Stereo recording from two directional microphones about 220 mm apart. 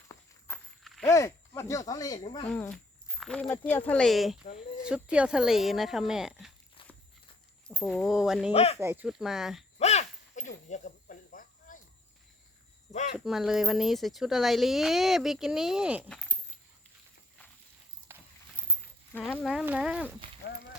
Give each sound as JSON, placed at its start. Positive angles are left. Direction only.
{"t": 0.5, "sound": "walk", "side_deg": 10}
{"t": 1.0, "sound": "speech", "side_deg": 15}
{"t": 2.5, "sound": "speech", "side_deg": 5}
{"t": 7.7, "sound": "speech", "side_deg": 0}
{"t": 8.5, "sound": "speech", "side_deg": 30}
{"t": 8.8, "sound": "speech", "side_deg": -10}
{"t": 9.7, "sound": "a sound", "side_deg": 30}
{"t": 10.7, "sound": "cricket", "side_deg": 35}
{"t": 12.9, "sound": "cricket", "side_deg": 30}
{"t": 13.1, "sound": "speech", "side_deg": 0}
{"t": 16.0, "sound": "a sound", "side_deg": 5}
{"t": 18.1, "sound": "walk", "side_deg": -10}
{"t": 19.2, "sound": "speech", "side_deg": 0}